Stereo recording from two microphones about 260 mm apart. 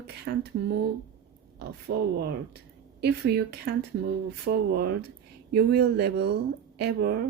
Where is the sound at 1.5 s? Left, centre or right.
Right.